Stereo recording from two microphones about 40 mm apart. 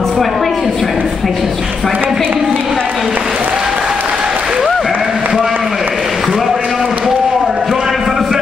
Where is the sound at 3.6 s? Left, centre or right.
Centre.